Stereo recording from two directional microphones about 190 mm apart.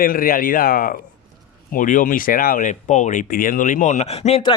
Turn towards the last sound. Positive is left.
turn(degrees=30)  # may be behind; listen again after turning